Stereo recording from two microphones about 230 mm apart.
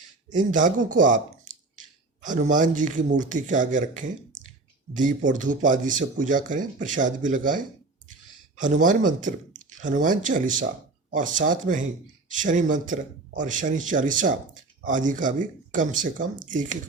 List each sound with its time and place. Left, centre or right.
0.3 s speech: right
2.2 s speech: right